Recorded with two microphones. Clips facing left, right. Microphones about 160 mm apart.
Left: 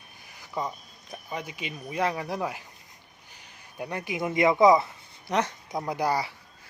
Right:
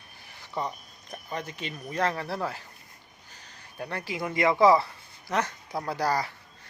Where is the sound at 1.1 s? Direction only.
10° left (ahead or behind).